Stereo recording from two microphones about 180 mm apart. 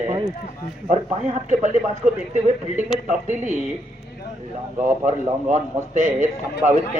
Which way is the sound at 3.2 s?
40° right (ahead or behind).